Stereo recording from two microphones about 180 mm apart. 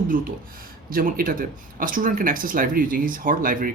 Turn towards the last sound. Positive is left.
turn(degrees=-50)  # may be behind; listen again after turning